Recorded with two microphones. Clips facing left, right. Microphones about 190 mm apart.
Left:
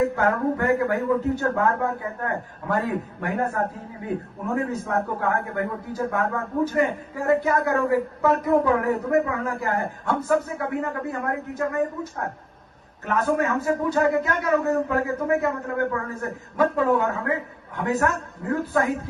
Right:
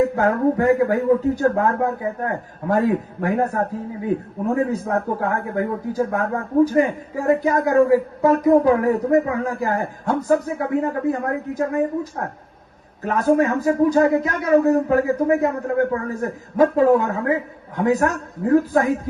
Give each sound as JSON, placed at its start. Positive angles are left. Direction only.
{"t": 0.2, "sound": "a man's voice", "side_deg": -35}